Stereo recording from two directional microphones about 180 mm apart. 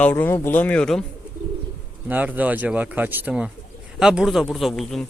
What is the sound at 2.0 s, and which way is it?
Speech, 10° right (ahead or behind).